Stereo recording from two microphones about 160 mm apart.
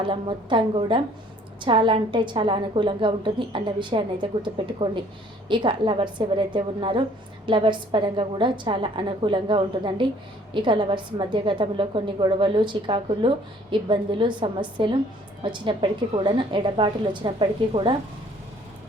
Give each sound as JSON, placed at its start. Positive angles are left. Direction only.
{"t": 0.0, "sound": "a woman's voice", "side_deg": -30}